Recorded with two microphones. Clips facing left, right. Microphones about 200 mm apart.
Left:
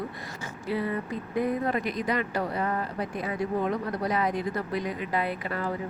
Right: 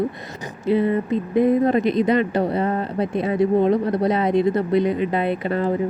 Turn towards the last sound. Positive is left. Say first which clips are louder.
# right 10 dB
turn(degrees=-25)  # may be behind; listen again after turning